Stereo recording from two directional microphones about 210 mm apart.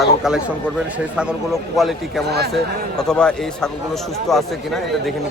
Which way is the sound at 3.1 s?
5° left (ahead or behind).